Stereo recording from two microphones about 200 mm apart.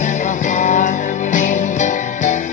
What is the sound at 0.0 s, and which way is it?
Music, 40° left (ahead or behind).